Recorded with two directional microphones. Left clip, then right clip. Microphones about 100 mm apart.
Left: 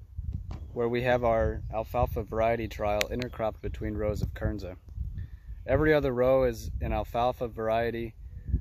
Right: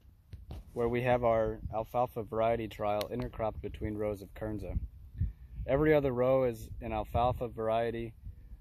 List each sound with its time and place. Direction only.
0.7 s speech: 20° left (ahead or behind); by 8.1 s 45° left (ahead or behind)